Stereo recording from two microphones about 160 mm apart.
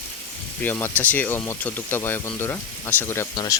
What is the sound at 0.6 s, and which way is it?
Speech, 10° left (ahead or behind).